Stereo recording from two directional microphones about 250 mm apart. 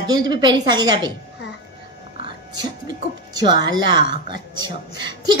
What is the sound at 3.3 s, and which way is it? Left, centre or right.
A woman's voice, centre.